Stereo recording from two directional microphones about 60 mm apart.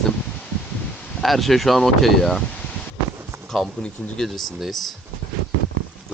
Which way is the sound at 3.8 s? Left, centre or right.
Centre.